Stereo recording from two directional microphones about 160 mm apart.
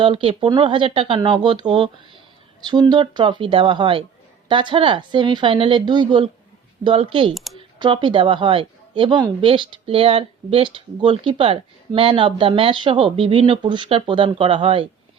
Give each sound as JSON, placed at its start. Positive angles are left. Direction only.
{"t": 0.0, "sound": "a woman's voice", "side_deg": -35}